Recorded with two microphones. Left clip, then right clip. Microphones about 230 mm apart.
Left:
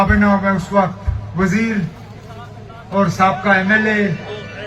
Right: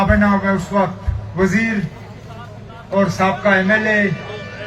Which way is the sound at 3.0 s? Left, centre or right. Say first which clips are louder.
Left 2 dB; right.